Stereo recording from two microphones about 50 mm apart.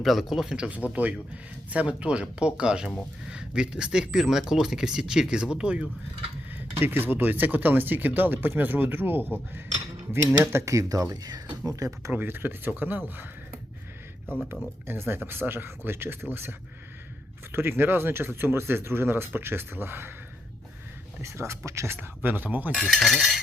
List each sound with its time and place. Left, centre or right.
0.0 s speech: centre
0.6 s speech: right
6.6 s speech: right
10.4 s speech: right
11.7 s speech: right
12.1 s speech: right
14.8 s speech: right
21.2 s speech: right
21.9 s speech: right
22.7 s cutlery: centre
23.0 s speech: centre